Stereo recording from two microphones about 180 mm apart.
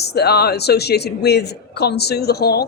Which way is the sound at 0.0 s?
65° left (ahead or behind).